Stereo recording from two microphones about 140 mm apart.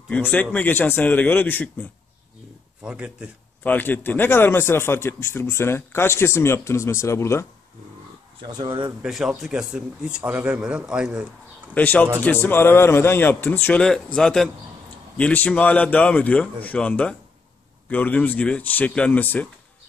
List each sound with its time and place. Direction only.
0.1 s a man's voice: 10° left (ahead or behind)
2.8 s speech: 5° right (ahead or behind)
3.6 s a man's voice: 15° left (ahead or behind)
8.4 s speech: 35° right (ahead or behind)
9.0 s speech: 5° right (ahead or behind)
11.7 s a man's voice: 10° left (ahead or behind)